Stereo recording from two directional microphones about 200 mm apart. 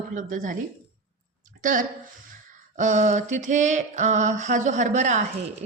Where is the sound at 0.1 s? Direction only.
40° right (ahead or behind).